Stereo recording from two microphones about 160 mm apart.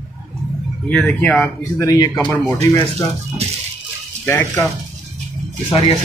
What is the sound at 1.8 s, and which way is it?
Speech, 20° left (ahead or behind).